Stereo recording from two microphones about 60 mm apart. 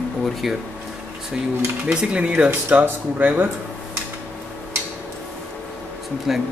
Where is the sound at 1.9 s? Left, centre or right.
Centre.